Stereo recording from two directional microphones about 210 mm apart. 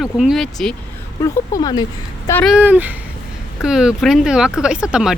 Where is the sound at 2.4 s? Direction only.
5° right (ahead or behind).